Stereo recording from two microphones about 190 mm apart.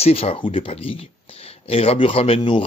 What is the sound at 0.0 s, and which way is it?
Speech, 30° left (ahead or behind).